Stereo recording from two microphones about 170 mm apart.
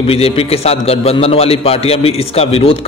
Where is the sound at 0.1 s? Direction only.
35° left (ahead or behind).